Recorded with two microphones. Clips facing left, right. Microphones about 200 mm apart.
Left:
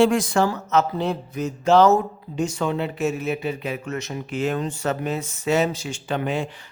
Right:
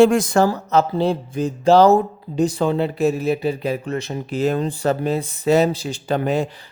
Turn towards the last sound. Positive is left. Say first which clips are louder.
# right 5 dB
turn(degrees=-35)  # may be behind; listen again after turning